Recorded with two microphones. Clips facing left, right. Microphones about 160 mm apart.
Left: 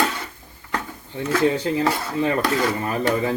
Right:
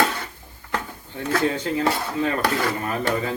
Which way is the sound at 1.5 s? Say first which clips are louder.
Left 2 dB; 30° left (ahead or behind).